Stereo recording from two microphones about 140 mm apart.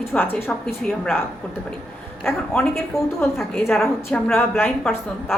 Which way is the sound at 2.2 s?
15° left (ahead or behind).